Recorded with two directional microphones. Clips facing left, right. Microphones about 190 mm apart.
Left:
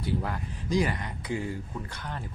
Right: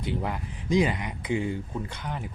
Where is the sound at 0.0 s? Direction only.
20° right (ahead or behind).